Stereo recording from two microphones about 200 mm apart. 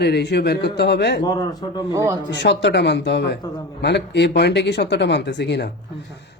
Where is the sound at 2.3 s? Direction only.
60° left (ahead or behind).